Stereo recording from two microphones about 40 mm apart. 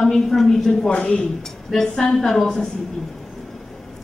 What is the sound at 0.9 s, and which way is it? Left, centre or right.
A woman's voice, left.